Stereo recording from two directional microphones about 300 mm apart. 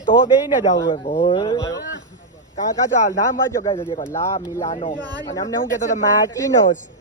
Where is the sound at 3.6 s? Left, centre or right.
Centre.